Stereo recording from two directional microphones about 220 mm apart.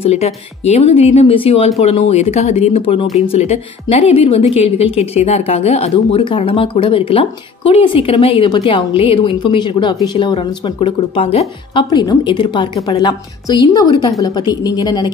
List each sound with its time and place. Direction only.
0.0 s a woman's voice: 30° left (ahead or behind)